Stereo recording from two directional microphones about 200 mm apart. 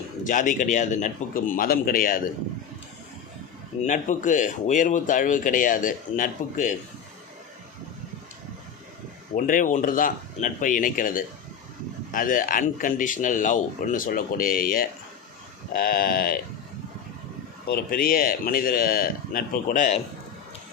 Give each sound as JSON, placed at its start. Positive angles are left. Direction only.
{"t": 0.3, "sound": "a man's voice", "side_deg": 40}
{"t": 3.8, "sound": "speech", "side_deg": 40}
{"t": 9.3, "sound": "a man's voice", "side_deg": 40}
{"t": 17.7, "sound": "a man's voice", "side_deg": 50}